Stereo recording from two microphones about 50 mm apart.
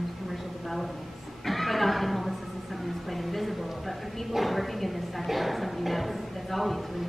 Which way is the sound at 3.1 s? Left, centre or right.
Centre.